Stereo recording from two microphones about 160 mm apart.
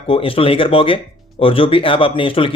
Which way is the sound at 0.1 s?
35° left (ahead or behind).